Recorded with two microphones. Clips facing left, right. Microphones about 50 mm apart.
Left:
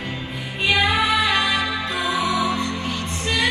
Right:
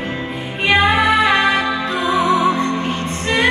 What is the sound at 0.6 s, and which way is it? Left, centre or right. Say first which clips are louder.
Music: right 5 dB; right.